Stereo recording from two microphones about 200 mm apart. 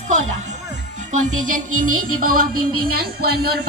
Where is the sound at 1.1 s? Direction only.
40° right (ahead or behind).